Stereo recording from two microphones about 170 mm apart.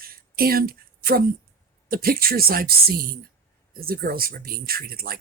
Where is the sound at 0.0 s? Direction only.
60° right (ahead or behind).